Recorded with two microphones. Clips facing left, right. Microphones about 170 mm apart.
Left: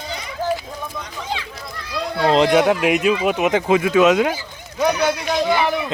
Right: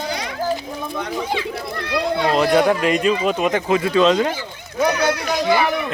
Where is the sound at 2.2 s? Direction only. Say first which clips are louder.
Left 3 dB; 20° left (ahead or behind).